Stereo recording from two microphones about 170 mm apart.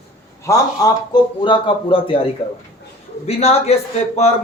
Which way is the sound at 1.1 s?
30° left (ahead or behind).